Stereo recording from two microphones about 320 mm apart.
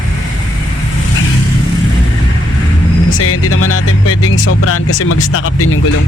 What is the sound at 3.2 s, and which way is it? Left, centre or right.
Speech, left.